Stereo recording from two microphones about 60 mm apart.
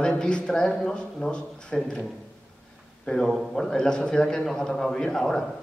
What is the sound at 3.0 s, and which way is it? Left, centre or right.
A man's voice, centre.